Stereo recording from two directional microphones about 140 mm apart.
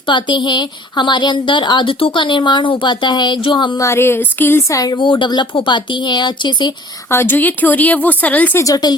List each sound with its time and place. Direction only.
0.0 s a woman's voice: 35° left (ahead or behind)
3.8 s a woman's voice: 20° left (ahead or behind); by 6.7 s 35° left (ahead or behind)
7.1 s speech: 15° left (ahead or behind)
8.6 s speech: 25° left (ahead or behind)